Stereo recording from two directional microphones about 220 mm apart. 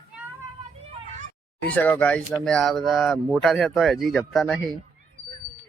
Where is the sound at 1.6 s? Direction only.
5° left (ahead or behind).